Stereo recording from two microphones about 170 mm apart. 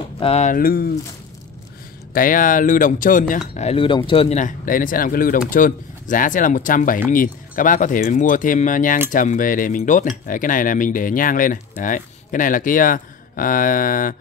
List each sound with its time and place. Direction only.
0.2 s speech: 40° left (ahead or behind)
0.6 s speech: 60° left (ahead or behind)
2.1 s speech: 50° left (ahead or behind); by 4.4 s 30° left (ahead or behind)
4.4 s speech: 50° left (ahead or behind)